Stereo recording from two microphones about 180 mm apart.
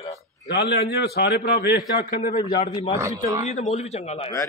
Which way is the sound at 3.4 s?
35° left (ahead or behind).